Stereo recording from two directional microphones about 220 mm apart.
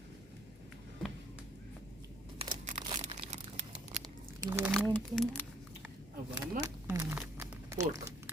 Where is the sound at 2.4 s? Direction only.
25° right (ahead or behind).